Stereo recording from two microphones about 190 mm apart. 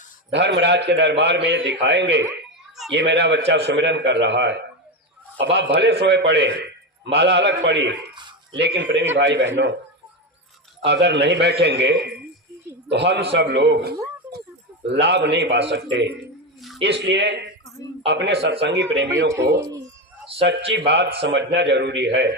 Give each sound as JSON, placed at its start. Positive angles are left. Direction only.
{"t": 0.3, "sound": "a man's voice", "side_deg": -65}
{"t": 10.8, "sound": "a man's voice", "side_deg": -65}
{"t": 19.3, "sound": "speech", "side_deg": -15}
{"t": 20.7, "sound": "a man's voice", "side_deg": -60}